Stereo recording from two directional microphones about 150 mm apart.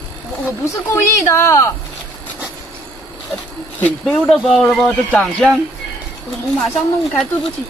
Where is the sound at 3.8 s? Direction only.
5° left (ahead or behind).